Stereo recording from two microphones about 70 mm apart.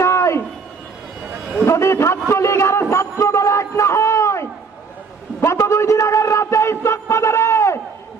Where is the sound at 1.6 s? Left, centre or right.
Left.